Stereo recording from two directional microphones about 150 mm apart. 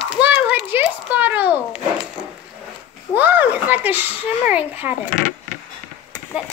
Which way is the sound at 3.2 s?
10° right (ahead or behind).